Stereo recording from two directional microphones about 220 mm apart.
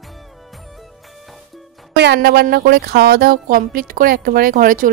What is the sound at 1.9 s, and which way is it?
A woman's voice, 50° right (ahead or behind).